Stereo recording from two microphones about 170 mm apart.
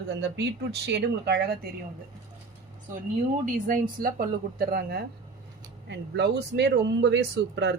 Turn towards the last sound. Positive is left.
turn(degrees=-90)